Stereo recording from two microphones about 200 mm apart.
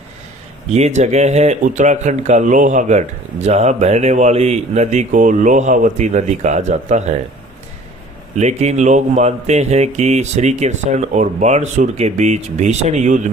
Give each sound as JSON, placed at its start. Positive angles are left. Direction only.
{"t": 0.7, "sound": "speech", "side_deg": -35}
{"t": 8.4, "sound": "speech", "side_deg": -35}